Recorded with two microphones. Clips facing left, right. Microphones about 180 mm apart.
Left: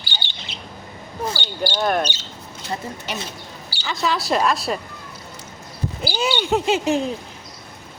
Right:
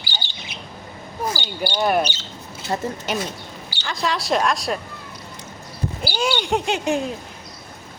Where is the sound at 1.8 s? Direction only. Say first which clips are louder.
Right 2 dB; 5° right (ahead or behind).